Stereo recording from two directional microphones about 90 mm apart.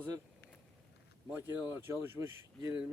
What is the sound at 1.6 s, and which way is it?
Speech, 25° right (ahead or behind).